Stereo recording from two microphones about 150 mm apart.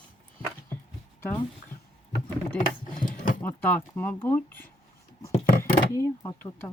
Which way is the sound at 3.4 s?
10° left (ahead or behind).